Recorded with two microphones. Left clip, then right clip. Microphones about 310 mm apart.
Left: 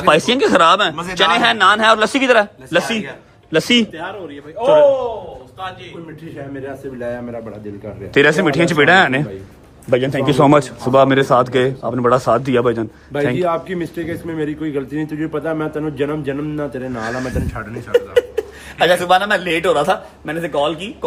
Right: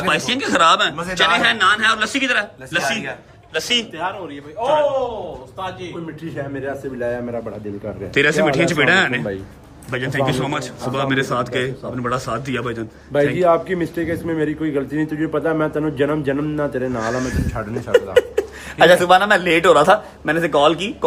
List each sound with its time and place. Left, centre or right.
0.0 s a man's voice: centre
3.5 s a man's voice: left
4.6 s a man's voice: centre
6.3 s a man's voice: centre